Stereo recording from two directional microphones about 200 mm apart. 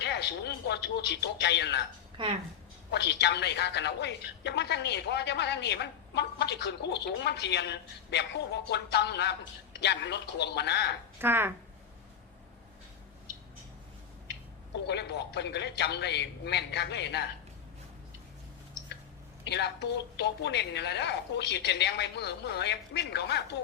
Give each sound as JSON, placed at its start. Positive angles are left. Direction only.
{"t": 0.0, "sound": "a woman's voice", "side_deg": 55}
{"t": 2.2, "sound": "a woman's voice", "side_deg": -25}
{"t": 2.9, "sound": "a woman's voice", "side_deg": 60}
{"t": 11.2, "sound": "speech", "side_deg": -10}
{"t": 14.8, "sound": "a woman's voice", "side_deg": 55}
{"t": 19.5, "sound": "a woman's voice", "side_deg": 60}